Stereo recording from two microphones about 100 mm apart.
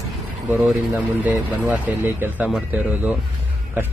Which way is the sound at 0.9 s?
15° right (ahead or behind).